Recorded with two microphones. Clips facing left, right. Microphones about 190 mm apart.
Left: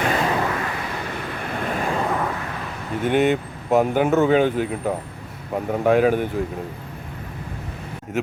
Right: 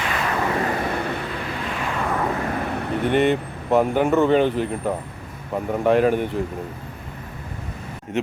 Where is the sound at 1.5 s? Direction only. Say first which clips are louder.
Left 3 dB; 50° left (ahead or behind).